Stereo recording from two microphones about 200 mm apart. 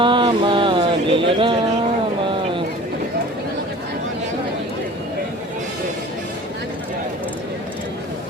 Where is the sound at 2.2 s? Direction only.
25° right (ahead or behind).